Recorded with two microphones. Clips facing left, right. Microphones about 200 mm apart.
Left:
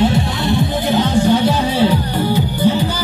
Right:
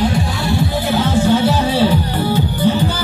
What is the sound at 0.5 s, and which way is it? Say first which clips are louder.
Music: left 1 dB; 20° left (ahead or behind).